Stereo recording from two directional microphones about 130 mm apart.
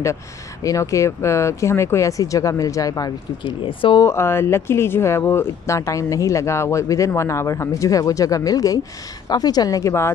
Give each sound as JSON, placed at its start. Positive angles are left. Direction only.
{"t": 0.7, "sound": "speech", "side_deg": 25}
{"t": 3.6, "sound": "speech", "side_deg": 40}
{"t": 4.0, "sound": "speech", "side_deg": 20}